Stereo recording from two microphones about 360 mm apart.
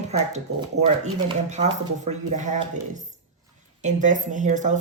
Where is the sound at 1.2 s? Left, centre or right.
Centre.